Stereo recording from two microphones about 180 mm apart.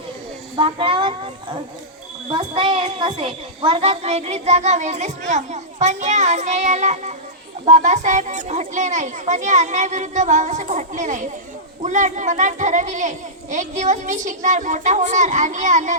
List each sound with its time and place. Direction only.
0.5 s a woman's voice: 30° right (ahead or behind)